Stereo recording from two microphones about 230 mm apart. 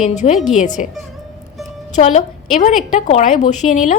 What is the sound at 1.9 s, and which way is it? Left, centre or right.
A woman's voice, left.